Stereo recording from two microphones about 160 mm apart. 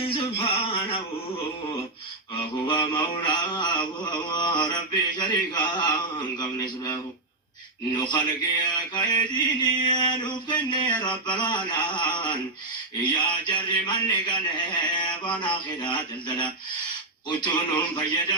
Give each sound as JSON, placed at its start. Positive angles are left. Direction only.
{"t": 0.0, "sound": "a sound", "side_deg": 35}
{"t": 2.6, "sound": "mantra", "side_deg": 30}
{"t": 8.1, "sound": "mantra", "side_deg": 30}
{"t": 17.2, "sound": "mantra", "side_deg": 30}